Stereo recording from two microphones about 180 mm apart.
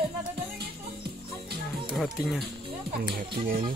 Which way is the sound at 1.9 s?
Centre (ahead or behind).